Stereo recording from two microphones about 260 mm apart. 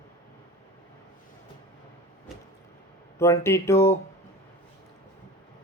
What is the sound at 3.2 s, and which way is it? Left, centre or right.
Speech, centre.